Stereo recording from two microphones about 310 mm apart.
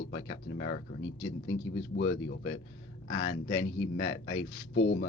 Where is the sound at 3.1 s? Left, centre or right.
Left.